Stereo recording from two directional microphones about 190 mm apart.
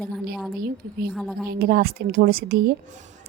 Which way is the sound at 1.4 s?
55° right (ahead or behind).